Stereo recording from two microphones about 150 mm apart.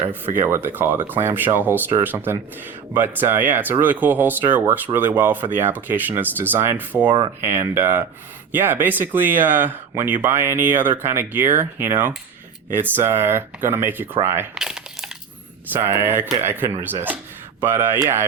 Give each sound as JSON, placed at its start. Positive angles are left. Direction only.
{"t": 0.1, "sound": "speech", "side_deg": -15}
{"t": 14.5, "sound": "a sound", "side_deg": -5}
{"t": 15.7, "sound": "speech", "side_deg": -15}